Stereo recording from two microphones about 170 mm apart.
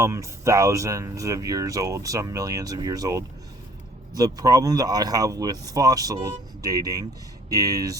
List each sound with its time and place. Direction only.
0.0 s speech: 15° right (ahead or behind)